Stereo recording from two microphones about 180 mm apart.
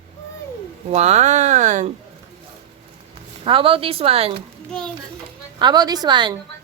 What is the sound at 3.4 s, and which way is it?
Speech, 30° right (ahead or behind).